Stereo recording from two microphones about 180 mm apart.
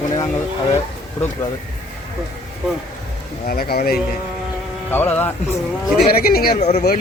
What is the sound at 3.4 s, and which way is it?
Speech, 55° left (ahead or behind).